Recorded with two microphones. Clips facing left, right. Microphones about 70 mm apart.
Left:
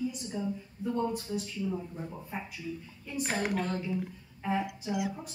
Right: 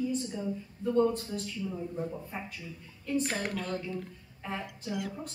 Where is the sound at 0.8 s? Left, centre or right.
Centre.